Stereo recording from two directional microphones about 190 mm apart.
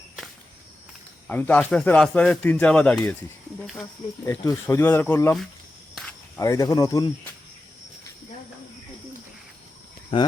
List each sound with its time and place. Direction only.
1.3 s speech: 10° left (ahead or behind)
4.3 s speech: 15° left (ahead or behind)
5.9 s cricket: 5° left (ahead or behind)
6.4 s speech: 20° left (ahead or behind)